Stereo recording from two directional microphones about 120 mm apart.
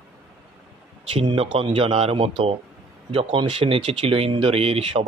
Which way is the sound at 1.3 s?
50° right (ahead or behind).